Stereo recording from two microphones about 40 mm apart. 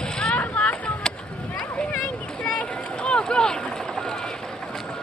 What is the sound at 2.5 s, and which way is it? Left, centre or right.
Boat, left.